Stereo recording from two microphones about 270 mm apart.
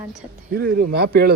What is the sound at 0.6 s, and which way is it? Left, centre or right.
Speech, right.